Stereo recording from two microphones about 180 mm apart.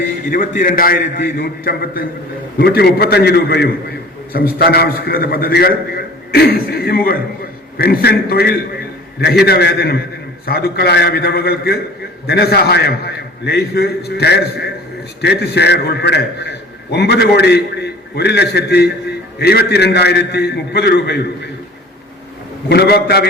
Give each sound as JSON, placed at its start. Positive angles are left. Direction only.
{"t": 0.3, "sound": "a man's voice", "side_deg": 50}
{"t": 22.7, "sound": "a man's voice", "side_deg": 60}